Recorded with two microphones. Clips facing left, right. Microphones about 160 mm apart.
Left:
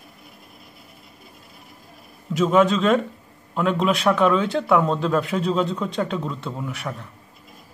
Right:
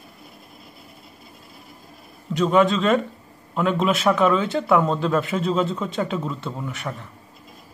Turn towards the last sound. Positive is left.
turn(degrees=0)  # may be behind; listen again after turning